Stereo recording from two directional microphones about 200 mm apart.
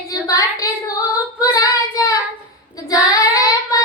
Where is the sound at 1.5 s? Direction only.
20° left (ahead or behind).